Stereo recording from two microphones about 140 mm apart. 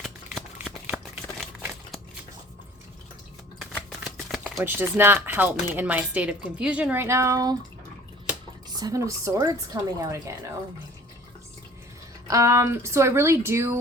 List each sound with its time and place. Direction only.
0.3 s shuffling cards: 10° right (ahead or behind)
4.0 s chopping: 5° right (ahead or behind)
4.6 s speech: 15° right (ahead or behind)
8.8 s speech: 25° right (ahead or behind)
12.3 s speech: 20° right (ahead or behind)